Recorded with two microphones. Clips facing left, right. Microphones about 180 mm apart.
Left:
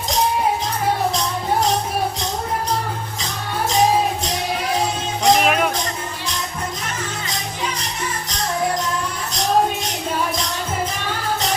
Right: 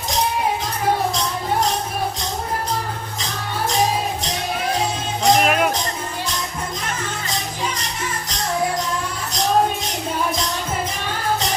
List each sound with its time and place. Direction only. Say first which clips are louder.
5.4 s music: even; centre (ahead or behind)